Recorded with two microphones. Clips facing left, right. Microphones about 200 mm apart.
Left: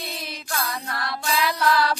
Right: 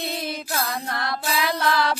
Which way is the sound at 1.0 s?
50° right (ahead or behind).